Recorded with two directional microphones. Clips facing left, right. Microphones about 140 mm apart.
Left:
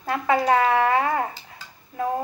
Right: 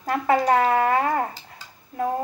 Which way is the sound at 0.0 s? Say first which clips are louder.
Right 1 dB; 40° right (ahead or behind).